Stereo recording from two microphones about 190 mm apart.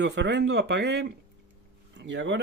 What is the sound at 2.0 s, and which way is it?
Speech, 75° right (ahead or behind).